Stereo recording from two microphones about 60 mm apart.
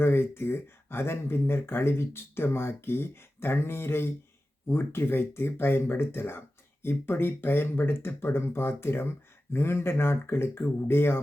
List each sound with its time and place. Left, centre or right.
0.0 s speech: left